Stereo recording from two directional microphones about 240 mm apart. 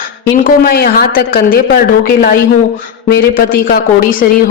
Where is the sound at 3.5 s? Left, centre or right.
Left.